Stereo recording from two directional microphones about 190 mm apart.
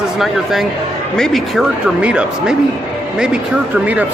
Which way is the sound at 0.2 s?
Centre (ahead or behind).